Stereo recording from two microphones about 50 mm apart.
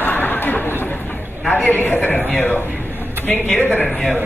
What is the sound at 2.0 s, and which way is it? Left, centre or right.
Speech, left.